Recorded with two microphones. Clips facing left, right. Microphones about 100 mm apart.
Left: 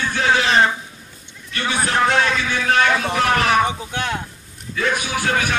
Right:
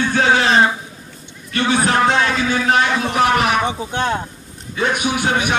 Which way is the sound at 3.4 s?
30° right (ahead or behind).